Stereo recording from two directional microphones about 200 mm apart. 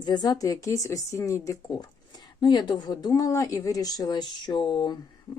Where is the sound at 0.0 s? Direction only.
20° left (ahead or behind).